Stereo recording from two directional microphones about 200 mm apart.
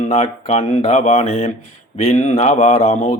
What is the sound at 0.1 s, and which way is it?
Mantra, 35° left (ahead or behind).